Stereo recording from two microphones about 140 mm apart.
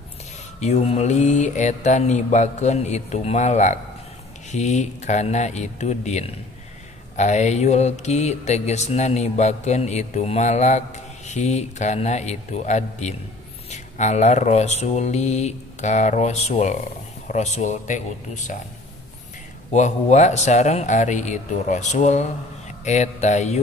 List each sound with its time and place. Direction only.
0.6 s speech: 50° left (ahead or behind)
7.2 s mantra: 55° left (ahead or behind)
11.2 s speech: 55° left (ahead or behind)
13.7 s mantra: 55° left (ahead or behind)
17.3 s speech: 60° left (ahead or behind)
19.7 s speech: 55° left (ahead or behind)